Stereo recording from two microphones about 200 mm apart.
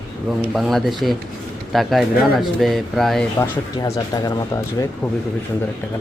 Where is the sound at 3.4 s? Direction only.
15° left (ahead or behind).